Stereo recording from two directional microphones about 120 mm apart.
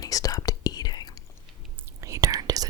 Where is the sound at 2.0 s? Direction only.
30° right (ahead or behind).